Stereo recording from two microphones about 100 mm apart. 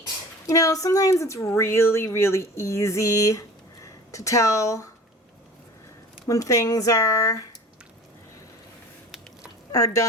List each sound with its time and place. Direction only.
0.4 s speech: 35° left (ahead or behind)
6.2 s speech: 35° left (ahead or behind)
9.7 s speech: 35° left (ahead or behind)